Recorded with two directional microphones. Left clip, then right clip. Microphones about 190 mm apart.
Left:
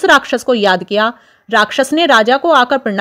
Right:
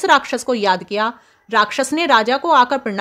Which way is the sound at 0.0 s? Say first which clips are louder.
Left 4 dB; 20° left (ahead or behind).